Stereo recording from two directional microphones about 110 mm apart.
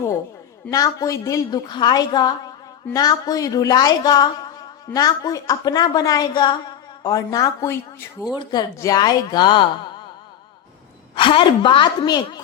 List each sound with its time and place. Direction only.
0.7 s a woman's voice: 30° left (ahead or behind)
8.8 s a woman's voice: 35° left (ahead or behind)
11.1 s a woman's voice: 50° left (ahead or behind)